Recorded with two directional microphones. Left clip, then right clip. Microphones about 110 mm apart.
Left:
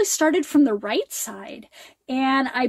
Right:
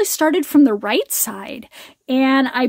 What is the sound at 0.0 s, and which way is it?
Speech, 50° right (ahead or behind).